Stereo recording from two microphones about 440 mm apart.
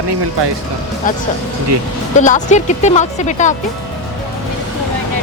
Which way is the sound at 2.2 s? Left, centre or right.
Centre.